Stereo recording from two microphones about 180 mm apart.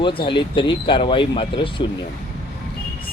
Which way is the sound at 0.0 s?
30° left (ahead or behind).